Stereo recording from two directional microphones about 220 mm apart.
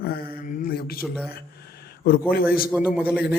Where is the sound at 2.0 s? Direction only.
40° left (ahead or behind).